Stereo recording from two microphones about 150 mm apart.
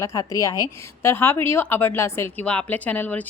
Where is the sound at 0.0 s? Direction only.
20° left (ahead or behind).